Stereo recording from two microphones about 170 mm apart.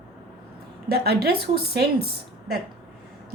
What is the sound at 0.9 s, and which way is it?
A woman's voice, 70° right (ahead or behind).